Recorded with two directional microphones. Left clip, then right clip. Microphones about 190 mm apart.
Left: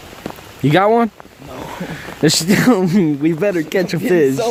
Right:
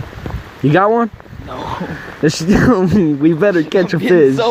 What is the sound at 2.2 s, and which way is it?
Speech, 20° left (ahead or behind).